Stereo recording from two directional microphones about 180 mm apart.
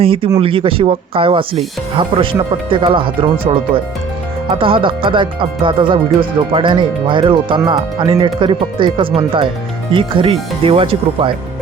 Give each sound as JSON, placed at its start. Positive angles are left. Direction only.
{"t": 0.0, "sound": "speech", "side_deg": -30}